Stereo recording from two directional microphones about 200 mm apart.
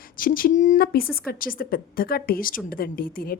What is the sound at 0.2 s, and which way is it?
A woman's voice, 45° left (ahead or behind).